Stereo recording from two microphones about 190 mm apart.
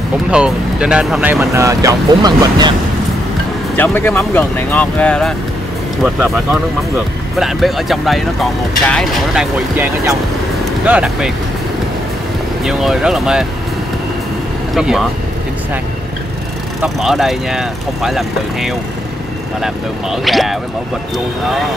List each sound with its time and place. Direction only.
0.3 s speech: 5° right (ahead or behind)
1.5 s speech: 15° right (ahead or behind)
3.7 s speech: 10° left (ahead or behind)
6.0 s speech: 5° right (ahead or behind)
10.9 s speech: 5° right (ahead or behind)
12.6 s speech: centre (ahead or behind)
14.7 s speech: centre (ahead or behind)
16.8 s speech: centre (ahead or behind)